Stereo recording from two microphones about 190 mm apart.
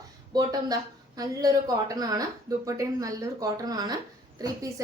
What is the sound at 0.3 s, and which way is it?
A woman's voice, 20° right (ahead or behind).